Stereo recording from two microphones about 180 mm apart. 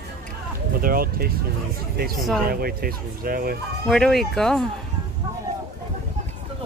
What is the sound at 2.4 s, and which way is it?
Speech, 55° right (ahead or behind).